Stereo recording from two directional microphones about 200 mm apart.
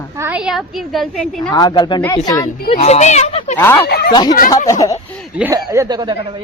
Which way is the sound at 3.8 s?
50° left (ahead or behind).